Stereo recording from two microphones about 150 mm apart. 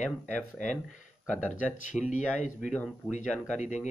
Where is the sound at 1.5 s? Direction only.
50° left (ahead or behind).